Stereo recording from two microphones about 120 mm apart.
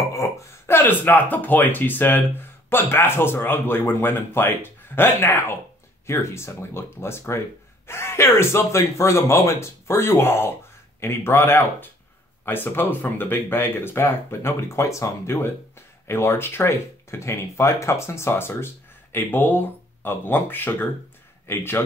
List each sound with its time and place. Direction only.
0.1 s speech: 25° left (ahead or behind)